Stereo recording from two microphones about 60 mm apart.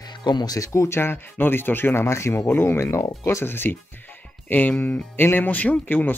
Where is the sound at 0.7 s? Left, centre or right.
Left.